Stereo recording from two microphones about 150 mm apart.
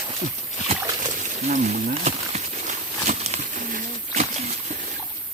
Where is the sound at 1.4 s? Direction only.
50° right (ahead or behind).